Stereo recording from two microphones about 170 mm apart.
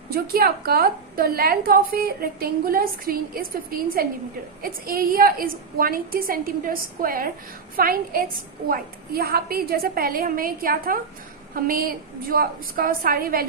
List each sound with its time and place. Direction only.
0.1 s a woman's voice: 65° right (ahead or behind)